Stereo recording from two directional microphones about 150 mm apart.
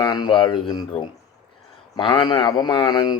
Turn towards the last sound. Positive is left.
turn(degrees=30)  # may be behind; listen again after turning